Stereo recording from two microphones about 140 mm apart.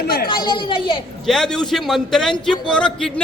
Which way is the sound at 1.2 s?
5° left (ahead or behind).